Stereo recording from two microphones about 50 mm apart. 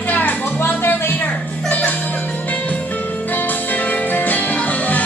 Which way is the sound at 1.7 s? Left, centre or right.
Left.